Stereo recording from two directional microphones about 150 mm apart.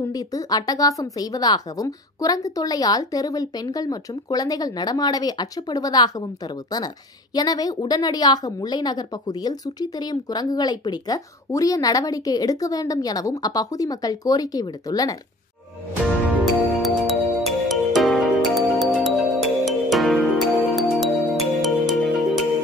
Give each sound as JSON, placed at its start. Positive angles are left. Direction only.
{"t": 0.1, "sound": "a woman's voice", "side_deg": 25}
{"t": 16.8, "sound": "music", "side_deg": 0}